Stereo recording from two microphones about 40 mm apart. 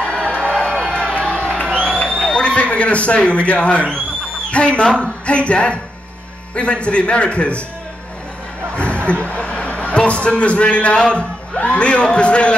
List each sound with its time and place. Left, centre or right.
0.0 s music: left
1.9 s a sound: left
3.3 s speech: left
8.7 s music: left
9.3 s a sound: left
9.9 s speech: left